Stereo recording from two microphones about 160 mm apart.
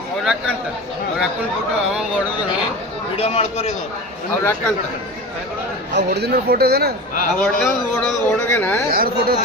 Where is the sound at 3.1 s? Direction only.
40° left (ahead or behind).